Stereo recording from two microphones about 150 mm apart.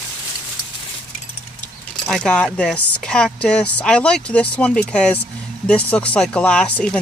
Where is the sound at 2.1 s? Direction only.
5° left (ahead or behind).